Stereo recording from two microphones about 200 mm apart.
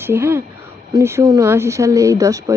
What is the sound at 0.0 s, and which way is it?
Speech, 10° right (ahead or behind).